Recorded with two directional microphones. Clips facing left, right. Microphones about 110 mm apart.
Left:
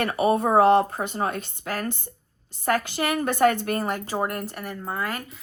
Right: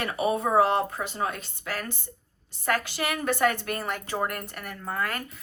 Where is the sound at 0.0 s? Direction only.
50° left (ahead or behind).